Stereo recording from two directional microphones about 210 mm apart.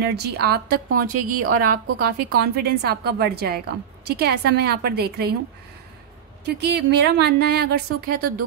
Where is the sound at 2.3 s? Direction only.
50° right (ahead or behind).